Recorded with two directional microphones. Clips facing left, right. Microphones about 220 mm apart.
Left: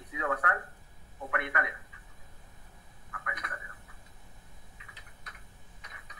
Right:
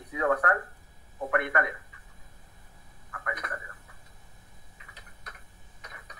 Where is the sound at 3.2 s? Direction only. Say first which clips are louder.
Right 6 dB; 45° right (ahead or behind).